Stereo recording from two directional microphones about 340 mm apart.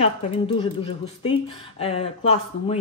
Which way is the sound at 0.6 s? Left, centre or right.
Centre.